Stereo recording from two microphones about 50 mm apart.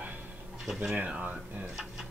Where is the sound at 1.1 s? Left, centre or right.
Right.